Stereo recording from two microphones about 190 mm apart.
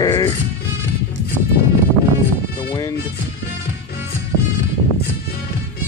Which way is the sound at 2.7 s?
20° left (ahead or behind).